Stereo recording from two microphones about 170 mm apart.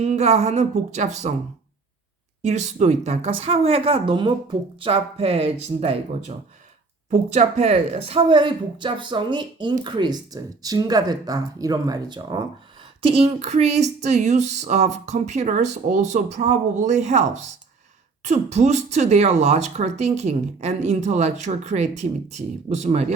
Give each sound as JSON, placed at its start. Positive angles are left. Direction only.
{"t": 0.0, "sound": "speech", "side_deg": -40}
{"t": 2.4, "sound": "a woman's voice", "side_deg": -40}